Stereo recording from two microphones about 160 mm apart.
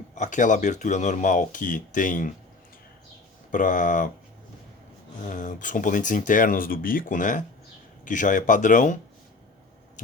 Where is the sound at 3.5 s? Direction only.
55° left (ahead or behind).